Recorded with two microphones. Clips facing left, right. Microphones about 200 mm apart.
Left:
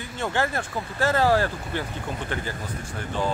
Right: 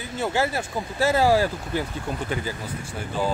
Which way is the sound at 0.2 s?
10° right (ahead or behind).